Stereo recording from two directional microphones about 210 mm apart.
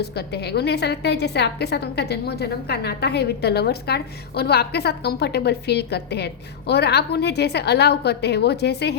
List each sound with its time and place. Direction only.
0.0 s a woman's voice: 50° left (ahead or behind)